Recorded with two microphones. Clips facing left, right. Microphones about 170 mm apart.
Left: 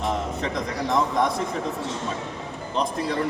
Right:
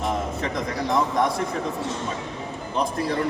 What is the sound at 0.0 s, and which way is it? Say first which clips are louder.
A man's voice: even; centre (ahead or behind).